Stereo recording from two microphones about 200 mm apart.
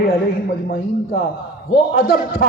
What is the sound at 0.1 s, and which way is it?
A man's voice, 50° left (ahead or behind).